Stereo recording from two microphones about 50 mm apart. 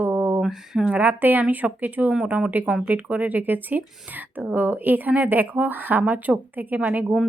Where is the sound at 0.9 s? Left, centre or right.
Right.